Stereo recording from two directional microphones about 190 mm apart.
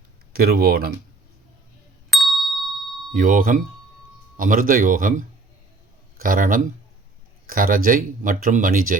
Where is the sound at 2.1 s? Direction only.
Centre (ahead or behind).